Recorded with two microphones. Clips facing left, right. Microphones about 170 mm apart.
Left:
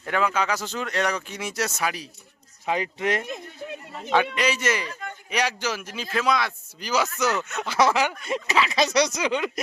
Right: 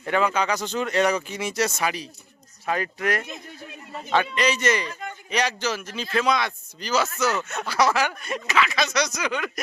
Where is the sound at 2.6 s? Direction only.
20° left (ahead or behind).